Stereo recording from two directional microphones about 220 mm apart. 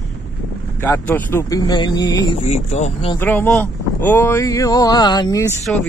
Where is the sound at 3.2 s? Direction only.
10° left (ahead or behind).